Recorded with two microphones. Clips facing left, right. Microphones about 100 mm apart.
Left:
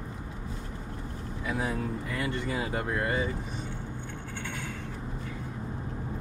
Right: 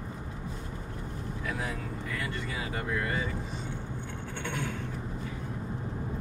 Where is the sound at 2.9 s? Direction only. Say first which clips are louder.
Left 1 dB; 35° left (ahead or behind).